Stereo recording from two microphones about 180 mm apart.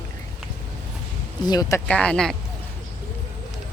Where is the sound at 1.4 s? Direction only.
20° left (ahead or behind).